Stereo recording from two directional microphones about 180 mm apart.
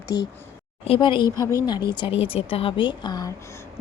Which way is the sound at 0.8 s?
30° left (ahead or behind).